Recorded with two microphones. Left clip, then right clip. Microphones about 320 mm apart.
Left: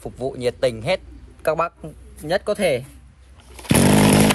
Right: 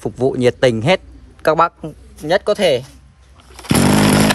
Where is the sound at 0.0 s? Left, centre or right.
Right.